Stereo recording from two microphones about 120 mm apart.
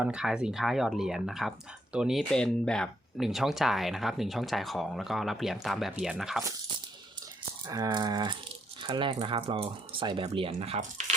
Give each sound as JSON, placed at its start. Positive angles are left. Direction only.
{"t": 0.0, "sound": "speech", "side_deg": -5}
{"t": 7.7, "sound": "speech", "side_deg": -35}